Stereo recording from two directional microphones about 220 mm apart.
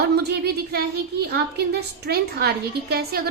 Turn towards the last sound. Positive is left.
turn(degrees=-45)  # may be behind; listen again after turning